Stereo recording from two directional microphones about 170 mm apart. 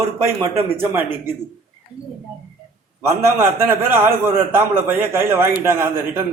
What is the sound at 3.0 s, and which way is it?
A man's voice, 15° right (ahead or behind).